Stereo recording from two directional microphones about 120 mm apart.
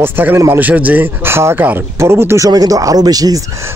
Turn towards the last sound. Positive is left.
turn(degrees=-25)  # may be behind; listen again after turning